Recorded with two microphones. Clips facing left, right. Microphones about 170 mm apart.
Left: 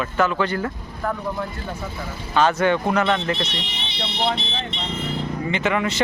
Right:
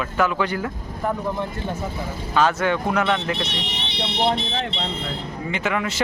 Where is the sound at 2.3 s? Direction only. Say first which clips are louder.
Left 2 dB; 5° right (ahead or behind).